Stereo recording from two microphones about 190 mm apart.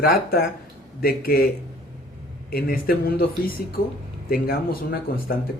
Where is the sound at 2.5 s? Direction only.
50° left (ahead or behind).